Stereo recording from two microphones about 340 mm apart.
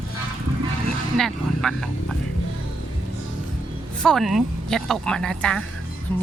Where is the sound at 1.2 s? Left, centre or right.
Centre.